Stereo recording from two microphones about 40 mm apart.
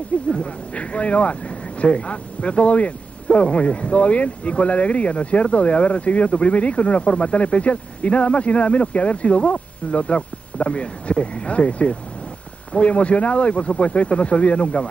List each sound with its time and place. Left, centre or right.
0.1 s speech: left